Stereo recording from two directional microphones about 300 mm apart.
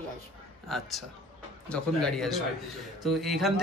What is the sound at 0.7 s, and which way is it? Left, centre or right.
A man's voice, centre.